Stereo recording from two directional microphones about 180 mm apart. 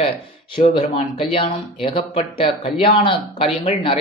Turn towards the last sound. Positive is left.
turn(degrees=30)  # may be behind; listen again after turning